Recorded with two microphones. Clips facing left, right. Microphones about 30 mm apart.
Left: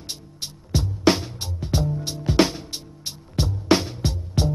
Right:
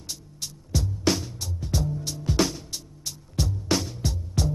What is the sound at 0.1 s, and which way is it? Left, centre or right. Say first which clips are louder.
Music: left 2 dB; left.